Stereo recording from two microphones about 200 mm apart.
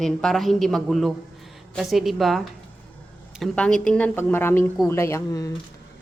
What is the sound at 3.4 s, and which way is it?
A woman's voice, 5° left (ahead or behind).